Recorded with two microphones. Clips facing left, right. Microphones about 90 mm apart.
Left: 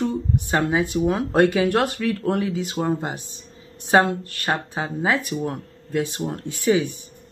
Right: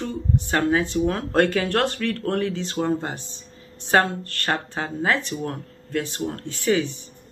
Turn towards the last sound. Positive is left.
turn(degrees=15)  # may be behind; listen again after turning